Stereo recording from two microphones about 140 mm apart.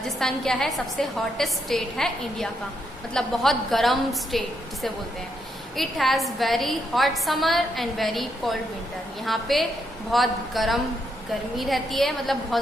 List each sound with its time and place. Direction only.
0.0 s a woman's voice: 5° left (ahead or behind)